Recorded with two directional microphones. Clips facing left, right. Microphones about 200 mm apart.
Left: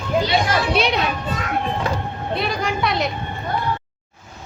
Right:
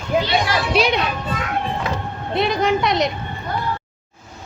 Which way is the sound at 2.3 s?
20° right (ahead or behind).